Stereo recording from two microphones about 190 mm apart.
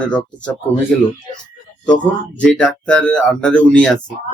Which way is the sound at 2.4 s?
5° left (ahead or behind).